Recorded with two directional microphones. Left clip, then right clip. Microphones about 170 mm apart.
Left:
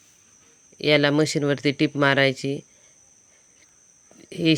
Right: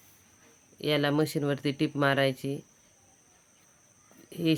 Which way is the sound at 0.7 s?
30° left (ahead or behind).